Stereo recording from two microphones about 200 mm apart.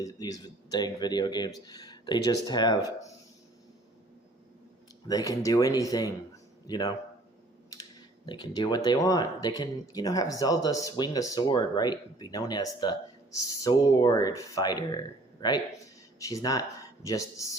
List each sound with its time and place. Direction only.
0.0 s speech: 20° left (ahead or behind)
5.0 s speech: 15° left (ahead or behind)
8.3 s speech: 20° left (ahead or behind)